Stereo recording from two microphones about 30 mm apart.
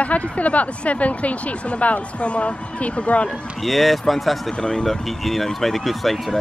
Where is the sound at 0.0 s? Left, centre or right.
Left.